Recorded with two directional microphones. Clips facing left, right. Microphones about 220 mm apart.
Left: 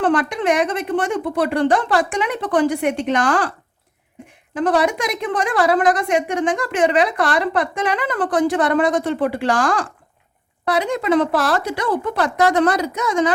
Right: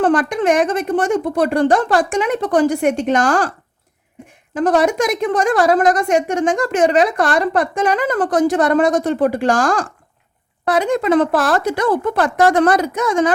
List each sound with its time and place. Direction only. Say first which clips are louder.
0.0 s a woman's voice: right 3 dB; 45° right (ahead or behind)
4.5 s a woman's voice: right 3 dB; 45° right (ahead or behind)